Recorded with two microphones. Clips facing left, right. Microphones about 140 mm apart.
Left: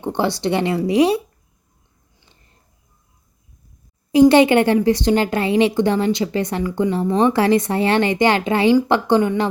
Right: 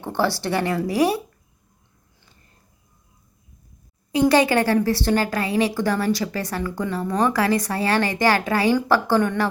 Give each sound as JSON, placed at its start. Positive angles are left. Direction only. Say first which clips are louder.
{"t": 0.0, "sound": "a woman's voice", "louder": "left 3 dB", "side_deg": 20}
{"t": 4.1, "sound": "a woman's voice", "louder": "left 6 dB", "side_deg": 25}